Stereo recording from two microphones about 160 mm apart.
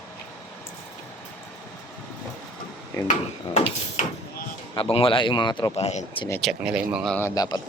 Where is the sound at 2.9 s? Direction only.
20° left (ahead or behind).